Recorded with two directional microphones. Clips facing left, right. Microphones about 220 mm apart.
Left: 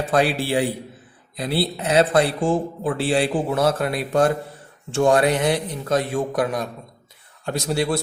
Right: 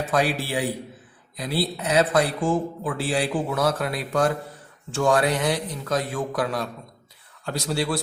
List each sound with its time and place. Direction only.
0.0 s speech: 30° left (ahead or behind)